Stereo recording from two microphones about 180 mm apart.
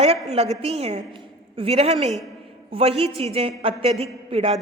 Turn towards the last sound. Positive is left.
turn(degrees=-30)  # may be behind; listen again after turning